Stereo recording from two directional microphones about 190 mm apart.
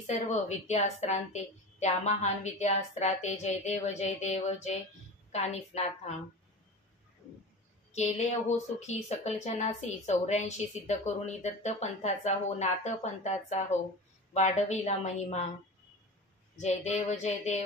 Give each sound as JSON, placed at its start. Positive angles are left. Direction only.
{"t": 0.0, "sound": "a woman's voice", "side_deg": 35}
{"t": 7.9, "sound": "a woman's voice", "side_deg": 35}
{"t": 16.5, "sound": "a woman's voice", "side_deg": 35}